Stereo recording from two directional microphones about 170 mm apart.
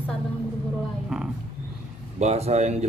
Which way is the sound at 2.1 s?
40° right (ahead or behind).